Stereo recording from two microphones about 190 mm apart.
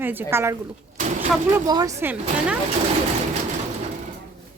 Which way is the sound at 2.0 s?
10° right (ahead or behind).